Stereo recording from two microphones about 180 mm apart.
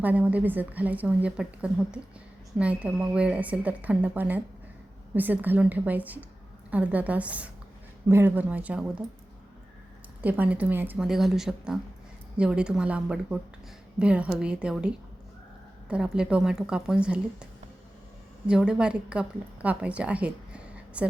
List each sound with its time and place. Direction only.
0.0 s a woman's voice: 10° right (ahead or behind)
10.2 s a woman's voice: 10° right (ahead or behind)